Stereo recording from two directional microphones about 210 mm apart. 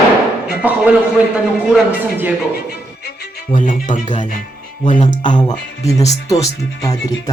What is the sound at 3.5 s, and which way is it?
Speech, 40° left (ahead or behind).